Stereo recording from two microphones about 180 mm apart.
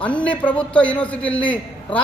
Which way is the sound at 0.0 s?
5° left (ahead or behind).